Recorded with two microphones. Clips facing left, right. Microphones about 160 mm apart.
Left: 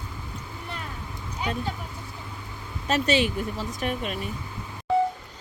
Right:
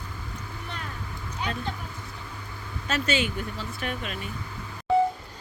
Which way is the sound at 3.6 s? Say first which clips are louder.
Left 4 dB; 40° left (ahead or behind).